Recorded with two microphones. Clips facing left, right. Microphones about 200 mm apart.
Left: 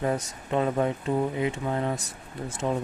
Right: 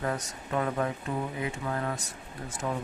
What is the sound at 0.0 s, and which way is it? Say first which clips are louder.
Speech: left 5 dB; 20° left (ahead or behind).